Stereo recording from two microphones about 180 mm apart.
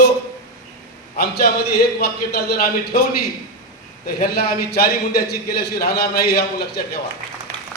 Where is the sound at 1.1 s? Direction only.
60° left (ahead or behind).